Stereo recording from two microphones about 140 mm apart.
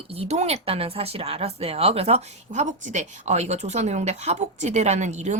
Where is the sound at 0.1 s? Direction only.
50° right (ahead or behind).